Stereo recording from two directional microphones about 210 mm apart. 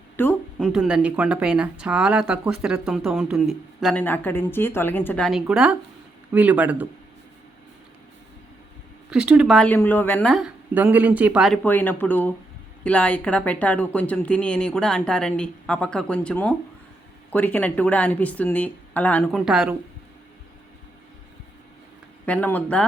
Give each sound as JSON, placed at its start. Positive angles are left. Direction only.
{"t": 0.2, "sound": "a sound", "side_deg": 10}
{"t": 0.7, "sound": "speech", "side_deg": -5}
{"t": 9.0, "sound": "speech", "side_deg": -5}
{"t": 22.3, "sound": "speech", "side_deg": 5}